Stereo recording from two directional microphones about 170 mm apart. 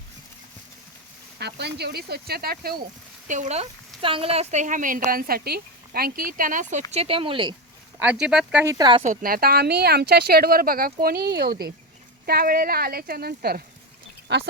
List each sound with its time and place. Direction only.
1.4 s speech: 75° right (ahead or behind)
3.2 s a woman's voice: 45° right (ahead or behind)
6.9 s speech: 35° right (ahead or behind)
8.0 s speech: 5° right (ahead or behind)
8.6 s speech: 20° right (ahead or behind)
9.0 s speech: 60° right (ahead or behind)
14.3 s speech: 90° right